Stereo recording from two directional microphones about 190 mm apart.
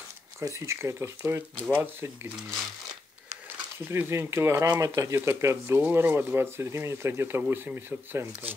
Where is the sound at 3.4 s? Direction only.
10° right (ahead or behind).